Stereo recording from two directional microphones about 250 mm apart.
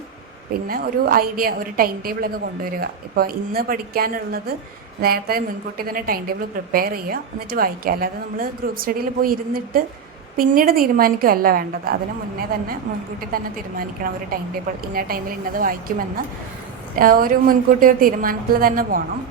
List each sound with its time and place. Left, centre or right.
0.7 s a woman's voice: right
13.3 s a woman's voice: right
16.9 s a woman's voice: right